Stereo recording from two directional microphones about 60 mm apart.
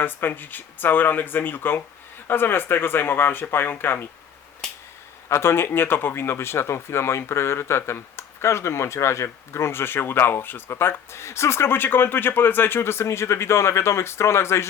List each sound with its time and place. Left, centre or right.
0.0 s speech: left
5.3 s speech: left